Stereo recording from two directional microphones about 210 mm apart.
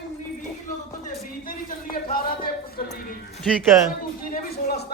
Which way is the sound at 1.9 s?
45° left (ahead or behind).